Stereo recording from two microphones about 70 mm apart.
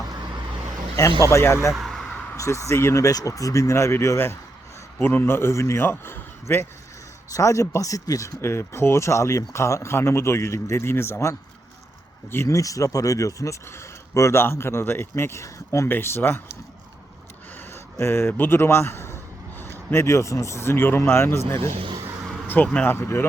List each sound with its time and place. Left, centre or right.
0.9 s speech: left
1.7 s a sound: centre
2.3 s speech: left
4.9 s speech: left
7.3 s speech: left
8.4 s speech: left
12.5 s speech: left
15.9 s speech: left
17.7 s a man's voice: left
22.4 s speech: left
22.9 s speech: left